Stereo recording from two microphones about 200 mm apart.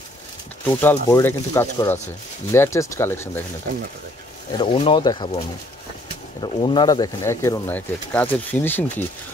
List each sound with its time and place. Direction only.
0.7 s speech: 10° left (ahead or behind)
4.5 s speech: 25° left (ahead or behind)
6.5 s speech: 25° left (ahead or behind)